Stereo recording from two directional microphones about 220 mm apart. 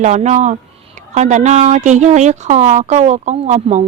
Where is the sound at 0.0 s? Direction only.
30° right (ahead or behind).